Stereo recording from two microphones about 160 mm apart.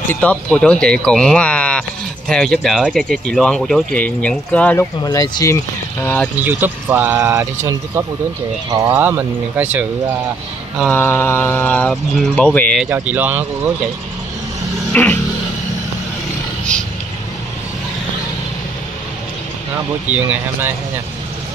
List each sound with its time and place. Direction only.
0.1 s speech: 10° left (ahead or behind)
5.0 s speech: 25° left (ahead or behind)
6.4 s speech: 10° right (ahead or behind)
10.9 s speech: 15° left (ahead or behind)
12.9 s speech: 10° right (ahead or behind)
14.9 s music: 10° left (ahead or behind)
20.1 s speech: 10° right (ahead or behind)